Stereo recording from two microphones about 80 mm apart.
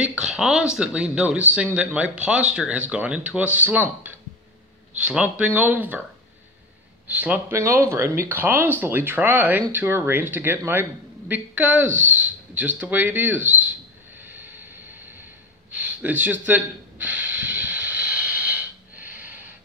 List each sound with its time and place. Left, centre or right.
0.2 s speech: centre
7.1 s speech: centre
7.5 s speech: right
14.2 s vehicle: right
15.7 s gasp: centre